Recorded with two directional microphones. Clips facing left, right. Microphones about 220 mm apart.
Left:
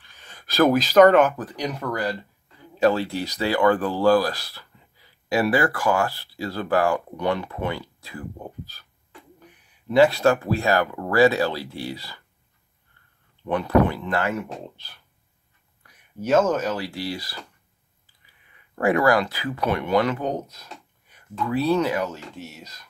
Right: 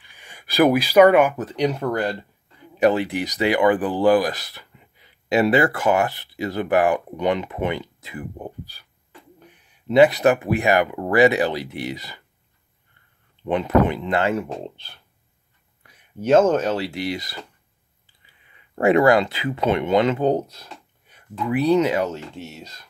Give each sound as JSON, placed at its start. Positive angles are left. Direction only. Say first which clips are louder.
{"t": 0.0, "sound": "gasp", "louder": "right 1 dB", "side_deg": -15}
{"t": 1.4, "sound": "speech", "louder": "right 6 dB", "side_deg": -25}
{"t": 9.8, "sound": "speech", "louder": "right 2 dB", "side_deg": -20}
{"t": 13.4, "sound": "speech", "louder": "right 1 dB", "side_deg": -20}
{"t": 18.8, "sound": "speech", "louder": "right 4 dB", "side_deg": -25}
{"t": 21.4, "sound": "speech", "louder": "right 3 dB", "side_deg": -20}